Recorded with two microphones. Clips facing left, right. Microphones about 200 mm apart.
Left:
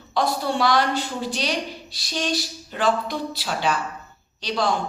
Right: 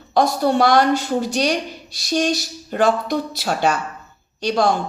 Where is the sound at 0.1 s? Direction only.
45° right (ahead or behind).